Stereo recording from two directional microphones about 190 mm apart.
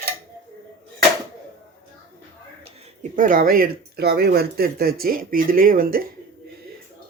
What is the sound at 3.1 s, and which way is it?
Speech, 45° right (ahead or behind).